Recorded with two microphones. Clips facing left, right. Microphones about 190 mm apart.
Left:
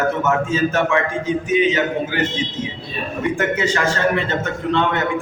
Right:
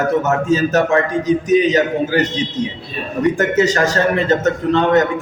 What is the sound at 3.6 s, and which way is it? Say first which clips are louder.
Speech: right 5 dB; 40° right (ahead or behind).